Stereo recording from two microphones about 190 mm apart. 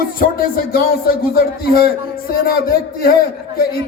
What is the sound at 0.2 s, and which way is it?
A man's voice, 50° left (ahead or behind).